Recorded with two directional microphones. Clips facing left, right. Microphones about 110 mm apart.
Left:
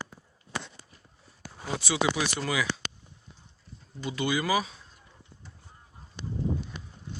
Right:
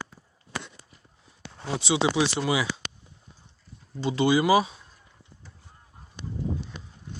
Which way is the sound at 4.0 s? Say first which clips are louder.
Right 7 dB; 30° right (ahead or behind).